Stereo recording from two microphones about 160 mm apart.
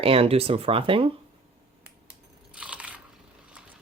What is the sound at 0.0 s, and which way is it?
Speech, 35° right (ahead or behind).